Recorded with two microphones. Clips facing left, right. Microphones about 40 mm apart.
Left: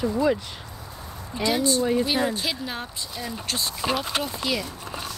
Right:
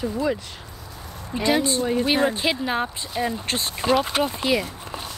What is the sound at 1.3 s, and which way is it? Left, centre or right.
Speech, right.